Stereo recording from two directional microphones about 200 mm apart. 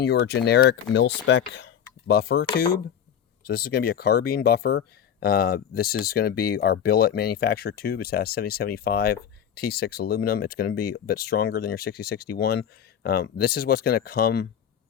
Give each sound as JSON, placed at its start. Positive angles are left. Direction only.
{"t": 0.0, "sound": "speech", "side_deg": 55}